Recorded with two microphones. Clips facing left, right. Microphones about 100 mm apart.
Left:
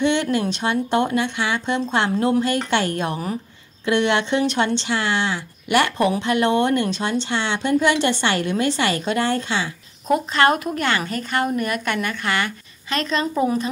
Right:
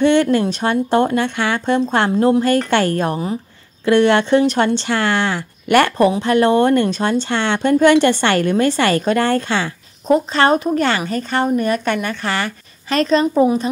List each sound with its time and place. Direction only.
0.0 s a woman's voice: 45° right (ahead or behind)
5.9 s a woman's voice: 35° right (ahead or behind); by 9.7 s 50° right (ahead or behind)
10.0 s a woman's voice: 30° right (ahead or behind)
13.2 s a woman's voice: 20° right (ahead or behind)